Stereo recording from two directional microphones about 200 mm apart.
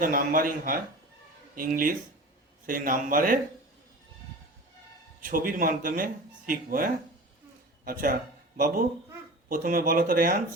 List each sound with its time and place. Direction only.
0.0 s speech: 45° right (ahead or behind)
5.2 s speech: 45° right (ahead or behind)
8.5 s speech: 45° right (ahead or behind)